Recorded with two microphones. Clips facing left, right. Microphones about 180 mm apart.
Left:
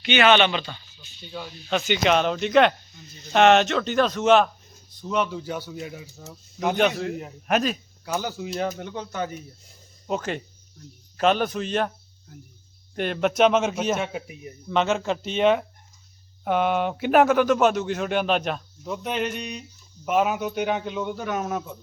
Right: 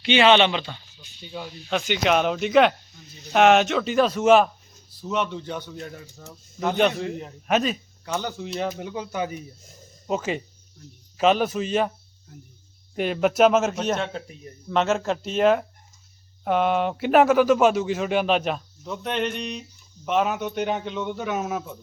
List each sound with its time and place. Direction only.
0.0 s speech: 25° right (ahead or behind)
1.3 s speech: 10° right (ahead or behind)
1.7 s speech: centre (ahead or behind)
14.7 s speech: centre (ahead or behind)